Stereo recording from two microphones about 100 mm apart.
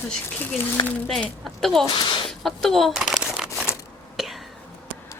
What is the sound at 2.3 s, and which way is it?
Shuffling cards, centre (ahead or behind).